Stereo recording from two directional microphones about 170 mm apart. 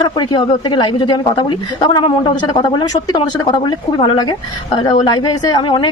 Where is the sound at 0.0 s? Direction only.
25° left (ahead or behind).